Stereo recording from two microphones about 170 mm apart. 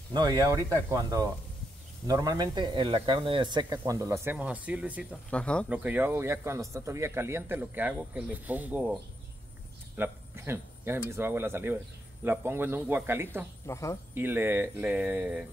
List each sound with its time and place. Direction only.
0.1 s speech: 25° right (ahead or behind); by 5.0 s 10° right (ahead or behind)
5.3 s speech: 5° left (ahead or behind)
5.7 s speech: 10° right (ahead or behind)
9.9 s speech: 15° right (ahead or behind)
13.7 s speech: 15° left (ahead or behind)
14.1 s speech: 10° right (ahead or behind)